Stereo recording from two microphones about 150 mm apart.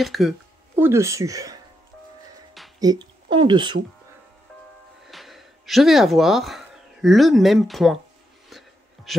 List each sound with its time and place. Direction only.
0.0 s speech: centre (ahead or behind)
0.7 s speech: 15° right (ahead or behind)
2.8 s speech: 25° right (ahead or behind)
5.1 s speech: centre (ahead or behind)
8.5 s music: centre (ahead or behind)